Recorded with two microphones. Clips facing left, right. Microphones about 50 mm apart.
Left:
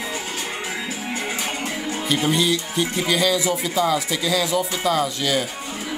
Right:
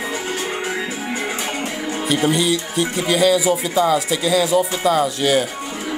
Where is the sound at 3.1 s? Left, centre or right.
Centre.